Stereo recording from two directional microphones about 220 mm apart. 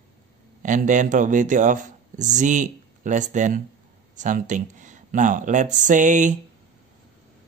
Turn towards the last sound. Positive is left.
turn(degrees=-35)  # may be behind; listen again after turning